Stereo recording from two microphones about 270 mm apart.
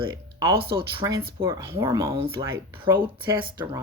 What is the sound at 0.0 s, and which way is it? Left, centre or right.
Speech, centre.